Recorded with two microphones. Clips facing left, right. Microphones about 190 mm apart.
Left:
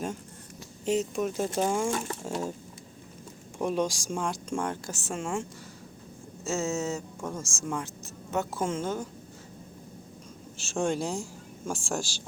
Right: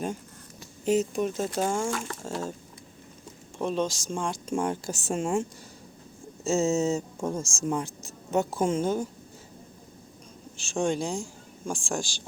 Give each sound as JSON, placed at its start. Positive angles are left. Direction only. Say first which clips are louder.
{"t": 0.9, "sound": "speech", "louder": "right 3 dB", "side_deg": 0}
{"t": 2.2, "sound": "speech", "louder": "left 1 dB", "side_deg": 15}
{"t": 3.6, "sound": "speech", "louder": "even", "side_deg": 10}
{"t": 6.4, "sound": "speech", "louder": "right 6 dB", "side_deg": -30}
{"t": 10.6, "sound": "speech", "louder": "right 1 dB", "side_deg": 5}